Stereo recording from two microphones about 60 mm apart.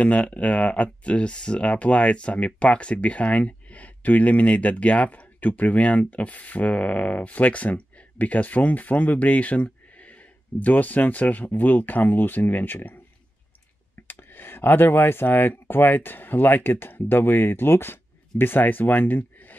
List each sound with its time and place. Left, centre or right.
0.0 s speech: left
14.0 s speech: left